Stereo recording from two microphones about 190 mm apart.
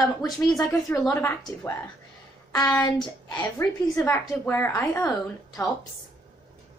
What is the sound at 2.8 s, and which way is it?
A woman's voice, 20° left (ahead or behind).